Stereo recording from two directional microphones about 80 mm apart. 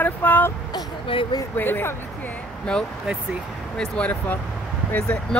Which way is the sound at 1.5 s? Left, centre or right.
Left.